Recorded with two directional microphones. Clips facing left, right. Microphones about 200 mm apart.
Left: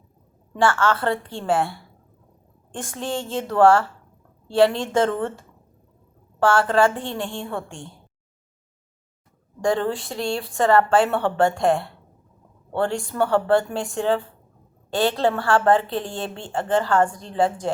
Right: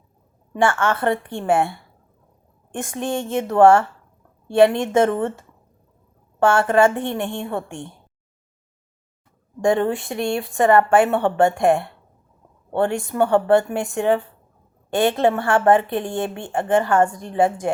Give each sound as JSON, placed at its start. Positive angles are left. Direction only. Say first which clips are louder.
{"t": 0.6, "sound": "speech", "louder": "right 1 dB", "side_deg": -20}
{"t": 2.7, "sound": "a woman's voice", "louder": "right 3 dB", "side_deg": -20}
{"t": 6.4, "sound": "speech", "louder": "right 2 dB", "side_deg": -20}
{"t": 9.6, "sound": "speech", "louder": "right 3 dB", "side_deg": -20}